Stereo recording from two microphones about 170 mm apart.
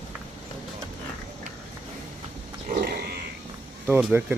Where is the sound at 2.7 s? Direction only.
65° right (ahead or behind).